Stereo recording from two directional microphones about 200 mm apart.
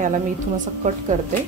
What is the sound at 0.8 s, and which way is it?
Speech, 40° right (ahead or behind).